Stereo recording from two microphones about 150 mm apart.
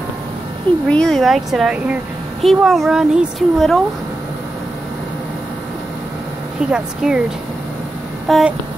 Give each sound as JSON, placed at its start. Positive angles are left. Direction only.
{"t": 0.8, "sound": "speech", "side_deg": 5}
{"t": 6.7, "sound": "speech", "side_deg": -5}
{"t": 8.3, "sound": "speech", "side_deg": 0}